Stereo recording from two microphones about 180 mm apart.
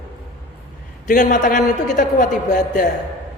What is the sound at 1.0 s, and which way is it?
A woman's voice, 45° left (ahead or behind).